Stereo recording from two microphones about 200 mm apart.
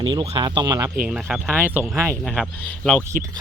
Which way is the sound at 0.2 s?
25° right (ahead or behind).